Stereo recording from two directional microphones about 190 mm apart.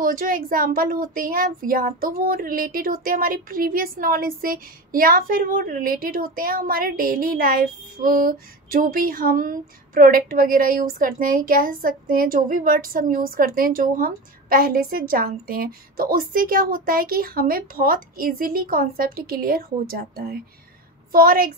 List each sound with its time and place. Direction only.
0.0 s speech: 45° right (ahead or behind)